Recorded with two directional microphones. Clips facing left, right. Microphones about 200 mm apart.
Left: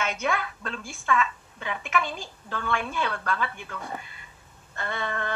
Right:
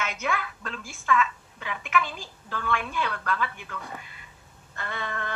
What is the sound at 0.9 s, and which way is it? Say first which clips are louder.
A woman's voice: right 1 dB; 35° left (ahead or behind).